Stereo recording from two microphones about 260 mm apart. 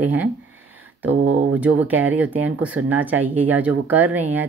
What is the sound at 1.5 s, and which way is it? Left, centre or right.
Speech, centre.